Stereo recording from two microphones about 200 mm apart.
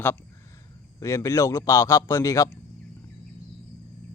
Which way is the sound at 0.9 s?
15° left (ahead or behind).